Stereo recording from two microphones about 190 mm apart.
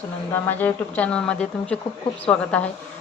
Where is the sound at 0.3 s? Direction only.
10° left (ahead or behind).